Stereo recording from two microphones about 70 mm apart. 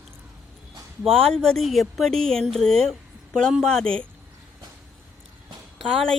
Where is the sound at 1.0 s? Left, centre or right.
Centre.